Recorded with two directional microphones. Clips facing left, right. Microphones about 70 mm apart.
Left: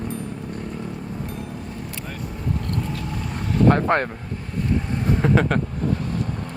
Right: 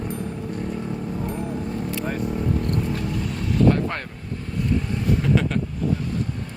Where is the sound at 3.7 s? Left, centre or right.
Left.